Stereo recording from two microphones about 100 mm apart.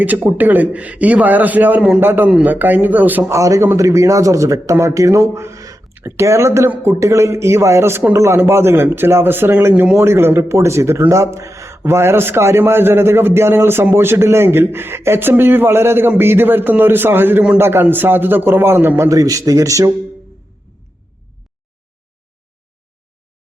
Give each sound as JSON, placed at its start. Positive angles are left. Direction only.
{"t": 0.3, "sound": "a man's voice", "side_deg": -15}
{"t": 3.3, "sound": "a man's voice", "side_deg": -30}